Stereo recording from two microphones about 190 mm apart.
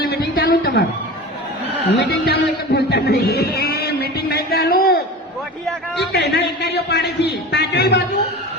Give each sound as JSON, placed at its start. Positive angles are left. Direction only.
{"t": 0.0, "sound": "a sound", "side_deg": 50}
{"t": 2.0, "sound": "music", "side_deg": 60}
{"t": 6.1, "sound": "a man's voice", "side_deg": 60}